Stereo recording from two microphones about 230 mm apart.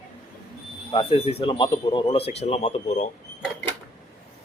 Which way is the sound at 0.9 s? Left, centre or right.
Left.